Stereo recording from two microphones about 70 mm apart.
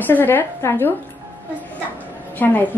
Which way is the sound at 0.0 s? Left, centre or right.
Left.